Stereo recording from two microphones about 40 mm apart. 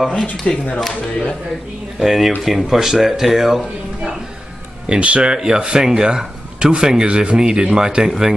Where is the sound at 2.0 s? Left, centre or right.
Centre.